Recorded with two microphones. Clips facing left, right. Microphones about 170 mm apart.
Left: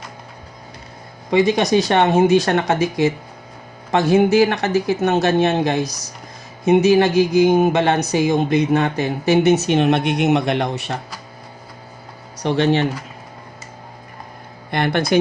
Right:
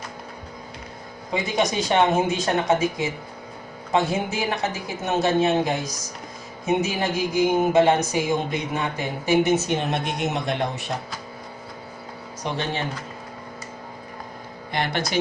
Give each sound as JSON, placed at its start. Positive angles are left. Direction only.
{"t": 1.3, "sound": "speech", "side_deg": 75}
{"t": 12.4, "sound": "speech", "side_deg": 75}
{"t": 14.7, "sound": "speech", "side_deg": 55}